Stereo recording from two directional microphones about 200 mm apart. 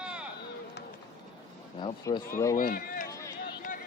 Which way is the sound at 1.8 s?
20° left (ahead or behind).